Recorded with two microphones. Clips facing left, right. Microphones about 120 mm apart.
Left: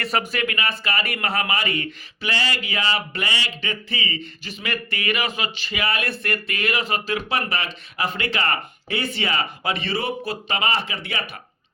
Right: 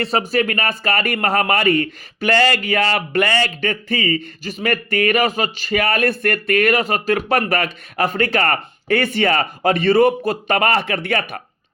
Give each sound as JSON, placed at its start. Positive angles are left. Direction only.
{"t": 0.0, "sound": "speech", "side_deg": -30}